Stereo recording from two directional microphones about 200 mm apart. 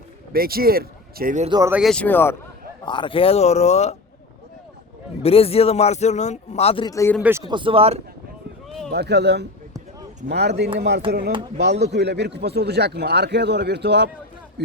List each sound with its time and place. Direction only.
0.3 s speech: 50° right (ahead or behind)
1.5 s speech: 20° right (ahead or behind)
1.7 s speech: centre (ahead or behind)
2.8 s speech: 25° left (ahead or behind)
5.2 s speech: 30° left (ahead or behind)
7.2 s speech: 10° right (ahead or behind); by 8.0 s 30° right (ahead or behind)
8.9 s speech: 55° right (ahead or behind)